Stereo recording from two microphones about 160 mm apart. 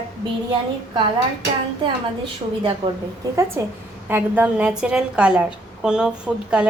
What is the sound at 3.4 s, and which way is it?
A woman's voice, 15° right (ahead or behind).